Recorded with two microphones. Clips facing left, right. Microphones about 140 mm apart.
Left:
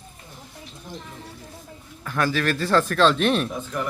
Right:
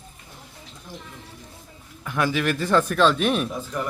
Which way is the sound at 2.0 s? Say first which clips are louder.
Even; 15° right (ahead or behind).